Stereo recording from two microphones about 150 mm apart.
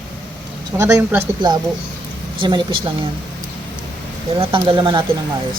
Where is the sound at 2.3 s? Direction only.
35° right (ahead or behind).